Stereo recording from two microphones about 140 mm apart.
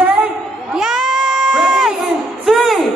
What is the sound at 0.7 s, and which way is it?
Baby cry, centre (ahead or behind).